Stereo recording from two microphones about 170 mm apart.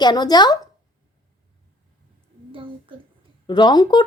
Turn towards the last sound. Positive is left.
turn(degrees=25)  # may be behind; listen again after turning